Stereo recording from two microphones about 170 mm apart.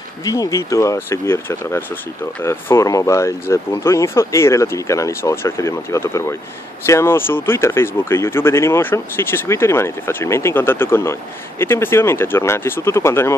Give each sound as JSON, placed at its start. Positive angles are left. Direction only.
{"t": 0.2, "sound": "speech", "side_deg": 20}